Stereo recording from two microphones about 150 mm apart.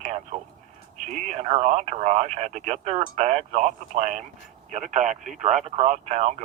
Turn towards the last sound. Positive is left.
turn(degrees=-50)  # may be behind; listen again after turning